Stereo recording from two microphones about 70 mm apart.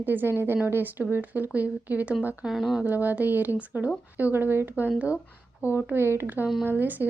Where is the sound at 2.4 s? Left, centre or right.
Centre.